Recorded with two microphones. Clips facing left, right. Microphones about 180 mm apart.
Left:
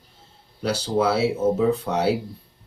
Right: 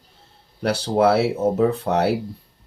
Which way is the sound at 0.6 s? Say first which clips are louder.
Right 4 dB; 60° right (ahead or behind).